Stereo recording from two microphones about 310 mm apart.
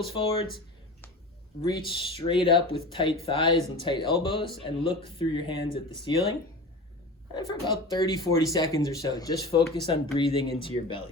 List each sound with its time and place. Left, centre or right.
0.1 s speech: centre
1.6 s speech: centre
7.3 s speech: centre